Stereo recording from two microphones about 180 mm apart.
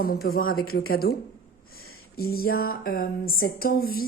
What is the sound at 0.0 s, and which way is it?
Speech, 55° left (ahead or behind).